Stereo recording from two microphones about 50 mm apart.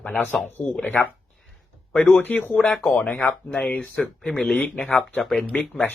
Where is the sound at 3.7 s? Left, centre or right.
Left.